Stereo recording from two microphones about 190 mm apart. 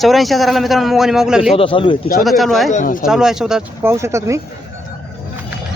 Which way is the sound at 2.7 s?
45° left (ahead or behind).